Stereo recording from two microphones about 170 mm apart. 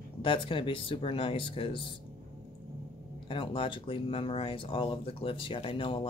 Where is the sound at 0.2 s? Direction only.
30° left (ahead or behind).